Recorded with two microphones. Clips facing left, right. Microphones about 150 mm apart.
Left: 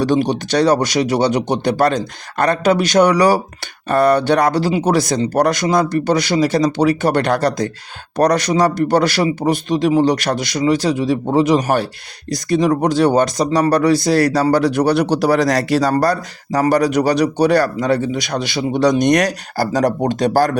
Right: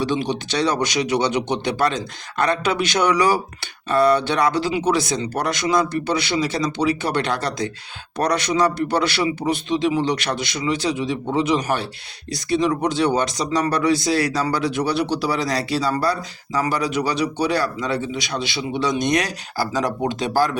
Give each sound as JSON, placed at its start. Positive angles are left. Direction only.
{"t": 0.0, "sound": "speech", "side_deg": 45}
{"t": 3.8, "sound": "speech", "side_deg": 50}
{"t": 14.8, "sound": "speech", "side_deg": 60}
{"t": 15.8, "sound": "speech", "side_deg": 45}
{"t": 19.0, "sound": "speech", "side_deg": 65}